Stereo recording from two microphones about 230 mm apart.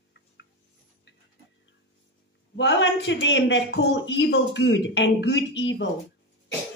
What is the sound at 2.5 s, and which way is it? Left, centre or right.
Speech, left.